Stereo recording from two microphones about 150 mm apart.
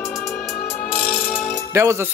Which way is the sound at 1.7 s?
20° right (ahead or behind).